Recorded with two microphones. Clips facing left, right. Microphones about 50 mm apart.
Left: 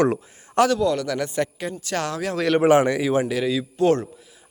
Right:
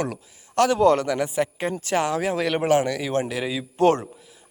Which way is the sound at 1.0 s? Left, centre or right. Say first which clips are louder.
Right 1 dB; centre.